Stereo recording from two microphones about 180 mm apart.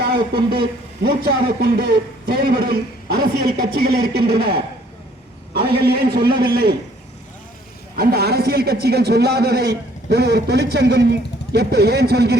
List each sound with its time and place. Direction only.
1.0 s a man's voice: 60° right (ahead or behind)
5.5 s a man's voice: 60° right (ahead or behind)
7.9 s a man's voice: 60° right (ahead or behind)